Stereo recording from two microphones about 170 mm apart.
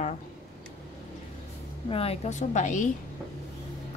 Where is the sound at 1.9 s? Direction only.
35° left (ahead or behind).